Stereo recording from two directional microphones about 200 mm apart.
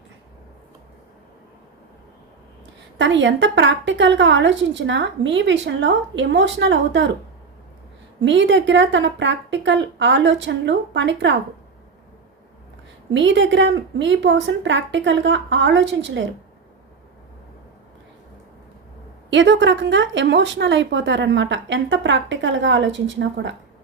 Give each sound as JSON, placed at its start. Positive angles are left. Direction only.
{"t": 3.0, "sound": "a woman's voice", "side_deg": -65}
{"t": 8.2, "sound": "a woman's voice", "side_deg": -65}
{"t": 13.1, "sound": "a woman's voice", "side_deg": -65}
{"t": 19.3, "sound": "a woman's voice", "side_deg": -65}